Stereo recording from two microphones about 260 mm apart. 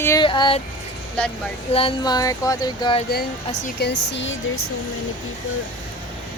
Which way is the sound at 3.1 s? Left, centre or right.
Left.